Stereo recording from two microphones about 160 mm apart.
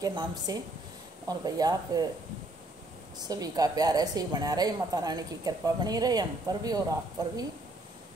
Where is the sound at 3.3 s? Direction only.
25° right (ahead or behind).